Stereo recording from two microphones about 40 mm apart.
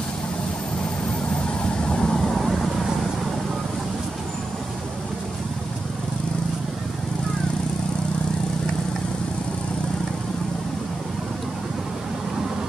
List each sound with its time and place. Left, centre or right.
1.8 s vehicle: left
2.2 s vehicle: centre